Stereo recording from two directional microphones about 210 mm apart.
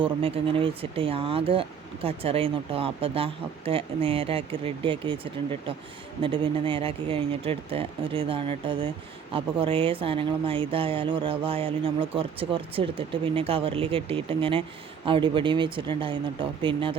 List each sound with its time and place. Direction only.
0.0 s speech: 25° right (ahead or behind)